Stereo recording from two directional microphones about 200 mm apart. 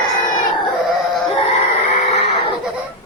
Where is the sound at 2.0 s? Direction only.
35° left (ahead or behind).